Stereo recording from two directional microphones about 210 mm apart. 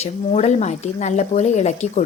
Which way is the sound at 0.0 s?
30° left (ahead or behind).